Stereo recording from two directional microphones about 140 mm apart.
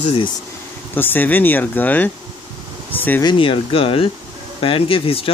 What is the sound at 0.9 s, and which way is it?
Speech, 15° left (ahead or behind).